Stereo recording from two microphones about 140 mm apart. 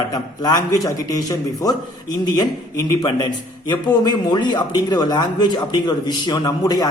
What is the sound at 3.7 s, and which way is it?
A man's voice, 30° left (ahead or behind).